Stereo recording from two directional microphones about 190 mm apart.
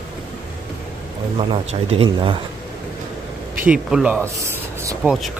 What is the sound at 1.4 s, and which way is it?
Speech, 30° right (ahead or behind).